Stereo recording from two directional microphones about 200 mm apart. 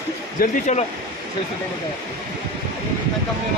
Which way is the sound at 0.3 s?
40° left (ahead or behind).